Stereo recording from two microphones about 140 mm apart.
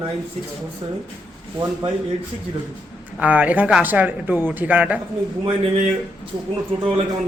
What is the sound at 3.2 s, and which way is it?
Speech, 10° right (ahead or behind).